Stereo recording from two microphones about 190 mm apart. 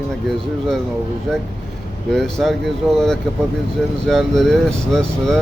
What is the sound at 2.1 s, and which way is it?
Speech, centre (ahead or behind).